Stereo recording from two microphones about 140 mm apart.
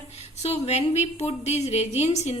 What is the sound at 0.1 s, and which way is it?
A woman's voice, 50° left (ahead or behind).